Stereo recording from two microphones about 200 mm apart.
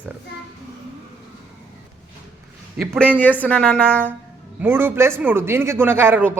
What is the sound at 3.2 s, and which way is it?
Speech, 10° left (ahead or behind).